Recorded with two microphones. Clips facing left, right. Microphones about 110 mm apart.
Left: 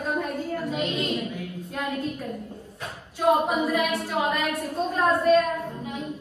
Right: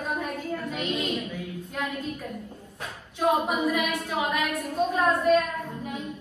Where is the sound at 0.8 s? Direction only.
Centre (ahead or behind).